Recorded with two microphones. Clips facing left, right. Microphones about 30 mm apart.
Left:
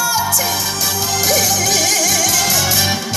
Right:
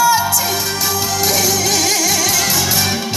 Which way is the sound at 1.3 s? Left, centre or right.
Centre.